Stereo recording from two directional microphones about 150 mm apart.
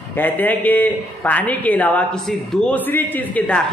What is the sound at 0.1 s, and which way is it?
A man's voice, 10° left (ahead or behind).